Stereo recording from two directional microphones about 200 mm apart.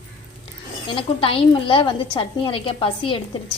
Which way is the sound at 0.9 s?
25° left (ahead or behind).